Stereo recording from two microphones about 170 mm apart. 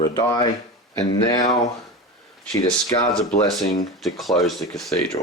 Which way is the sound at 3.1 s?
5° left (ahead or behind).